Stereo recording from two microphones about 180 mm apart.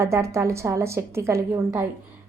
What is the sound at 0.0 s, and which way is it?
A woman's voice, 15° right (ahead or behind).